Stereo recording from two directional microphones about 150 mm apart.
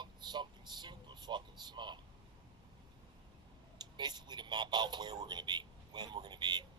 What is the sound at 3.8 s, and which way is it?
Speech, 30° right (ahead or behind).